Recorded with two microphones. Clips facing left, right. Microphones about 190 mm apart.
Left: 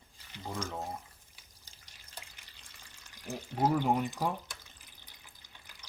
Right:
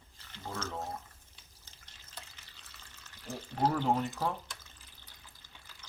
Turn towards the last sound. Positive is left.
turn(degrees=15)  # may be behind; listen again after turning